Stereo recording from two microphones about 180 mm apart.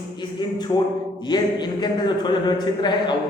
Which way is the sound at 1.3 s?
25° left (ahead or behind).